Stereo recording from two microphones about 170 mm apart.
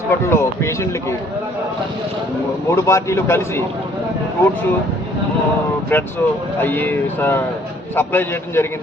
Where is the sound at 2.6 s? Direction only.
15° left (ahead or behind).